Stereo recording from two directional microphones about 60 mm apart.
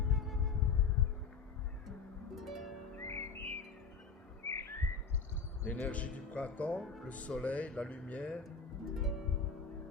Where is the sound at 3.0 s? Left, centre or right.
Left.